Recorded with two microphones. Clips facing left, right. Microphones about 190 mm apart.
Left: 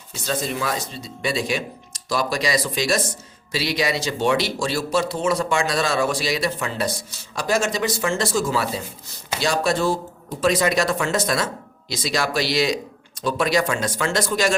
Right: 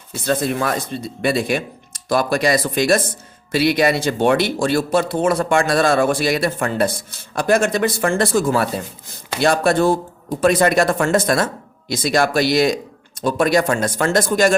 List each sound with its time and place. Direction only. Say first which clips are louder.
0.1 s speech: right 6 dB; 55° right (ahead or behind)